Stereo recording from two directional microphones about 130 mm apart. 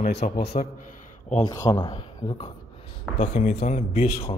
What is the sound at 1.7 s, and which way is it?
Speech, 35° left (ahead or behind).